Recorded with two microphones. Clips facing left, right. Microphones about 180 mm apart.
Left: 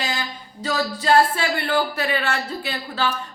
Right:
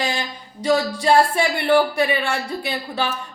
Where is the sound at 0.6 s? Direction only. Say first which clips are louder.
Right 5 dB; 15° right (ahead or behind).